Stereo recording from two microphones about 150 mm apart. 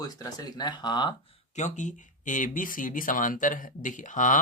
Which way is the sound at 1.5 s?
55° left (ahead or behind).